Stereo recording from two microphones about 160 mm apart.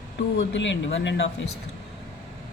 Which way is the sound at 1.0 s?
90° left.